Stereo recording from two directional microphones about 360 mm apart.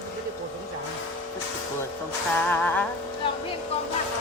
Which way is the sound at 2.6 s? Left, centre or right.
Centre.